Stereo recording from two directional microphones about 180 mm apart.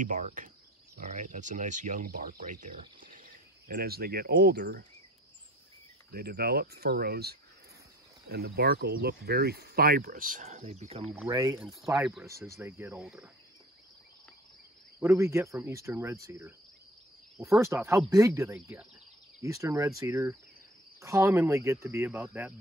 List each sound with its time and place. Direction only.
0.0 s speech: 45° right (ahead or behind); by 4.8 s 60° right (ahead or behind)
6.1 s speech: 60° right (ahead or behind); by 11.1 s 40° right (ahead or behind)
11.2 s speech: 20° right (ahead or behind)
12.0 s speech: centre (ahead or behind)
12.3 s speech: 15° right (ahead or behind)
15.0 s speech: 15° right (ahead or behind)